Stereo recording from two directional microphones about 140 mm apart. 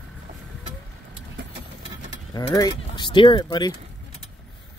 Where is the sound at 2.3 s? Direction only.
25° left (ahead or behind).